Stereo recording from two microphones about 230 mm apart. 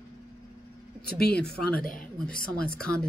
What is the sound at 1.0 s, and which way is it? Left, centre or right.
Speech, left.